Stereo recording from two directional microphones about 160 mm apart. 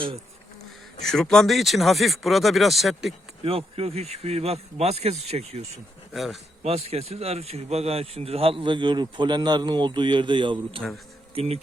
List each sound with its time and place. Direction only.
1.0 s speech: 5° left (ahead or behind)
3.4 s speech: 35° right (ahead or behind)
6.1 s speech: centre (ahead or behind)
6.6 s speech: 40° right (ahead or behind)